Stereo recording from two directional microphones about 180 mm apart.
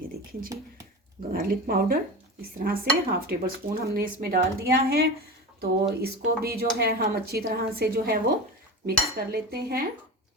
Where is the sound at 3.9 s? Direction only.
55° right (ahead or behind).